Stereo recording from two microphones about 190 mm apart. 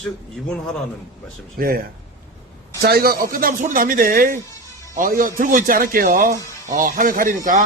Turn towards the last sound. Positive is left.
turn(degrees=-45)  # may be behind; listen again after turning